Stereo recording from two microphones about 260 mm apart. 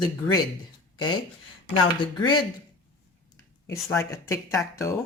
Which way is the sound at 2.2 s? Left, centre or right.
Centre.